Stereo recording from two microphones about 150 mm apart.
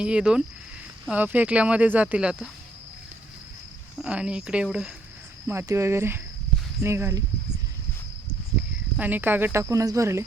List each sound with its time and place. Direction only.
0.0 s speech: 5° right (ahead or behind)
3.9 s speech: 5° right (ahead or behind)
5.5 s speech: 20° right (ahead or behind)
9.0 s speech: 10° right (ahead or behind)